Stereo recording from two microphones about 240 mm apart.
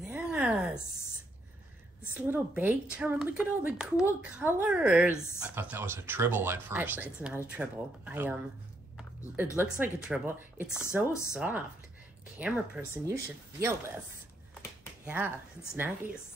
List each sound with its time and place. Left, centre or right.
0.1 s a sound: centre
2.2 s a woman's voice: centre
9.6 s a woman's voice: centre
15.0 s speech: centre